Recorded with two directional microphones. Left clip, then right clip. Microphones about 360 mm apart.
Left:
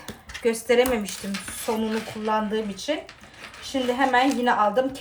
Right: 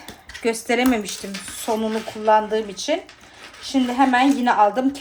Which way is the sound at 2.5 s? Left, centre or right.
Right.